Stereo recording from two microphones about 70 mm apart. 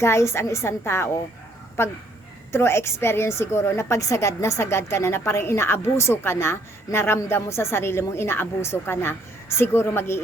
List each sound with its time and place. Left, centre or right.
0.0 s a woman's voice: left